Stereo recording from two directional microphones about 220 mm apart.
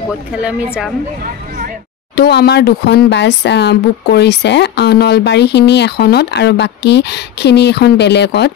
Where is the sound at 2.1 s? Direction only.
45° left (ahead or behind).